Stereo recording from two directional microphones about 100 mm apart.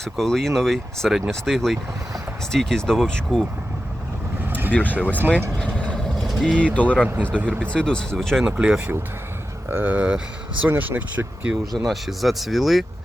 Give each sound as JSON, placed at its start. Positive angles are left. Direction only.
{"t": 0.0, "sound": "speech", "side_deg": 5}
{"t": 4.4, "sound": "vehicle", "side_deg": -20}
{"t": 4.7, "sound": "speech", "side_deg": 15}
{"t": 4.9, "sound": "speech", "side_deg": -15}
{"t": 5.5, "sound": "vehicle", "side_deg": 10}
{"t": 6.2, "sound": "speech", "side_deg": 0}
{"t": 6.7, "sound": "speech", "side_deg": 15}
{"t": 8.4, "sound": "speech", "side_deg": -10}
{"t": 11.9, "sound": "speech", "side_deg": 0}